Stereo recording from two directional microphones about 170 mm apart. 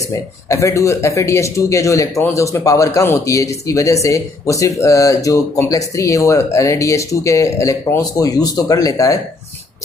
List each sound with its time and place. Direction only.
0.5 s speech: 20° left (ahead or behind)